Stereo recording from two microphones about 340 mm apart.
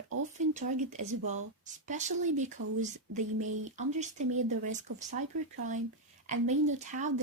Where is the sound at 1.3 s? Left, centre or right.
Right.